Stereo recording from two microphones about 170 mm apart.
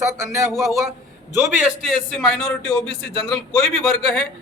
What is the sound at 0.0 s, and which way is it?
Speech, 15° right (ahead or behind).